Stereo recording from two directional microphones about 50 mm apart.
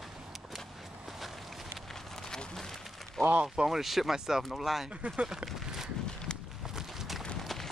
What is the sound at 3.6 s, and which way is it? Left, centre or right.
Speech, centre.